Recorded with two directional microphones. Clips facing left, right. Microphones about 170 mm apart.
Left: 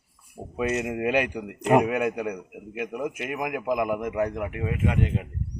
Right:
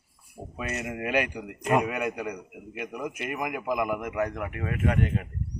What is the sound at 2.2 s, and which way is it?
A man's voice, 10° left (ahead or behind).